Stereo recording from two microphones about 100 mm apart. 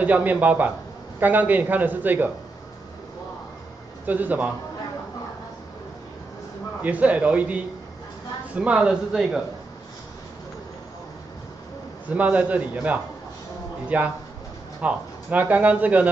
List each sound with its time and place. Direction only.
0.0 s speech: 15° right (ahead or behind)
4.0 s speech: 15° right (ahead or behind)
6.8 s speech: 15° right (ahead or behind)
12.1 s speech: 15° right (ahead or behind)